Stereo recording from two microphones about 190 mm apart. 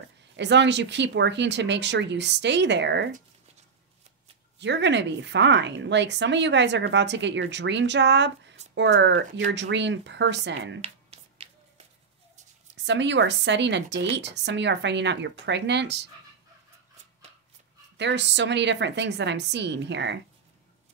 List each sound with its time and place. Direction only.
0.4 s a woman's voice: 65° right (ahead or behind)
4.6 s a woman's voice: 70° right (ahead or behind)
10.8 s finger snapping: 30° right (ahead or behind)
12.7 s a woman's voice: 70° right (ahead or behind)
17.9 s a woman's voice: 65° right (ahead or behind)